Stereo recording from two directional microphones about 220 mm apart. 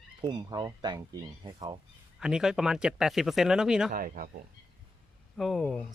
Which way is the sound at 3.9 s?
40° right (ahead or behind).